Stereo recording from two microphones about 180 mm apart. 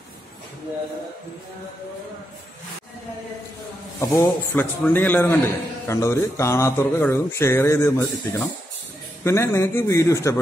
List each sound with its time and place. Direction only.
4.0 s speech: 15° left (ahead or behind)